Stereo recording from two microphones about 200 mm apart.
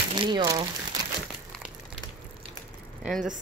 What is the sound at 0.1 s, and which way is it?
Speech, 25° right (ahead or behind).